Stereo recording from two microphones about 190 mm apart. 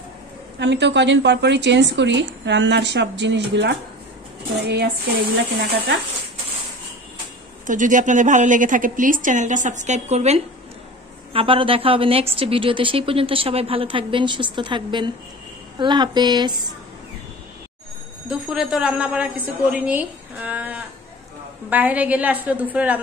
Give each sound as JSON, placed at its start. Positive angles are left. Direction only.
{"t": 0.6, "sound": "a woman's voice", "side_deg": -65}
{"t": 4.6, "sound": "a sound", "side_deg": -60}
{"t": 7.6, "sound": "a woman's voice", "side_deg": -40}
{"t": 18.3, "sound": "a woman's voice", "side_deg": -5}